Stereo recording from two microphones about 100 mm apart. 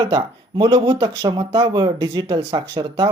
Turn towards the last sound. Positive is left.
turn(degrees=-45)  # may be behind; listen again after turning